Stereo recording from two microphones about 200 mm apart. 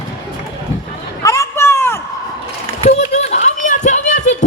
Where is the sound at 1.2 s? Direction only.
15° left (ahead or behind).